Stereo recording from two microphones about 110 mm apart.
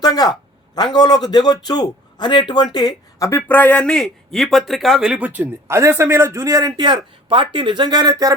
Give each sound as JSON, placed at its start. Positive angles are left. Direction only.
{"t": 0.0, "sound": "a man's voice", "side_deg": 35}
{"t": 3.5, "sound": "a man's voice", "side_deg": 15}